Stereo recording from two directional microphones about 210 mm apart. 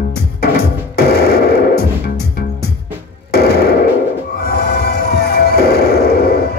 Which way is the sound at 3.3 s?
50° left (ahead or behind).